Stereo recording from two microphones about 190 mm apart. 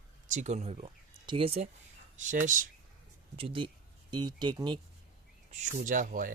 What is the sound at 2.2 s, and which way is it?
Speech, 40° right (ahead or behind).